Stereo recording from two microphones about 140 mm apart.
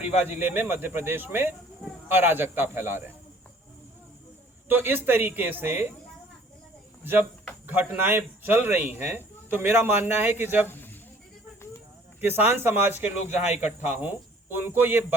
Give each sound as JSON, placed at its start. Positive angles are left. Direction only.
{"t": 0.0, "sound": "speech", "side_deg": -10}
{"t": 4.7, "sound": "speech", "side_deg": -15}
{"t": 7.0, "sound": "speech", "side_deg": -15}
{"t": 10.7, "sound": "a sound", "side_deg": 15}
{"t": 12.2, "sound": "speech", "side_deg": -15}